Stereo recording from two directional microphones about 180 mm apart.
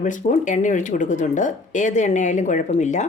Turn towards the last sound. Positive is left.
turn(degrees=40)  # may be behind; listen again after turning